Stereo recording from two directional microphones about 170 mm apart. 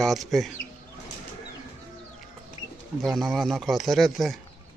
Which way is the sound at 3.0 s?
Centre (ahead or behind).